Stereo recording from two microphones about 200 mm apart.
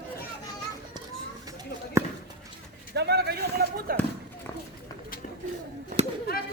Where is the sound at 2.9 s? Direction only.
55° right (ahead or behind).